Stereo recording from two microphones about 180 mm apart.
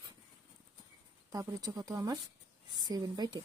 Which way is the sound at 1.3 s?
20° right (ahead or behind).